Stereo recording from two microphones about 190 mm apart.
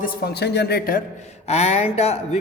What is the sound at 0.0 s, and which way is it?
Speech, 55° left (ahead or behind).